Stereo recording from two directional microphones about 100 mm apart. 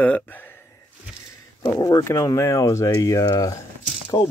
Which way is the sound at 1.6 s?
35° left (ahead or behind).